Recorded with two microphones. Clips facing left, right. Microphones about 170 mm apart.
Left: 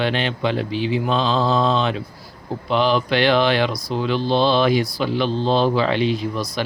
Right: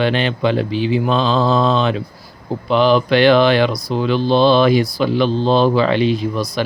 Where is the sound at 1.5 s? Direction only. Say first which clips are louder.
Right 3 dB; 75° right (ahead or behind).